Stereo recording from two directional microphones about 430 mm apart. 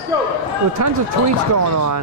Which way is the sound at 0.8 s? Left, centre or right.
Right.